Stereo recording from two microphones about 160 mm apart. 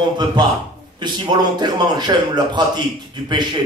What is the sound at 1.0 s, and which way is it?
A man's voice, 25° right (ahead or behind).